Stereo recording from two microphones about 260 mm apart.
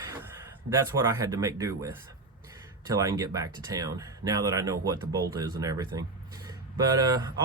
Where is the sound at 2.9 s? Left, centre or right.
Centre.